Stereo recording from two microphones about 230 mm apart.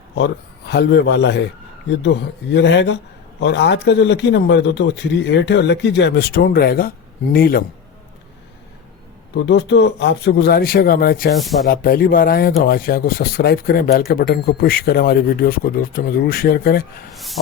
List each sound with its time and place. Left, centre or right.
0.2 s speech: left
2.5 s speech: left
9.3 s speech: left
17.2 s speech: centre